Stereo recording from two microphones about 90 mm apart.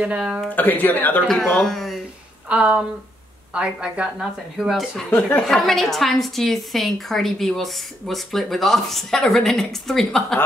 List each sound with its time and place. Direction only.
0.0 s speech: 10° right (ahead or behind)
0.5 s speech: 20° left (ahead or behind)
1.2 s a woman's voice: 5° left (ahead or behind)
2.5 s a woman's voice: 10° right (ahead or behind)